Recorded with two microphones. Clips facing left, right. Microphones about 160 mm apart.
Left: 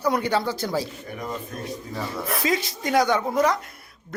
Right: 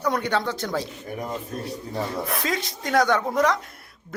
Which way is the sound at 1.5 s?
35° right (ahead or behind).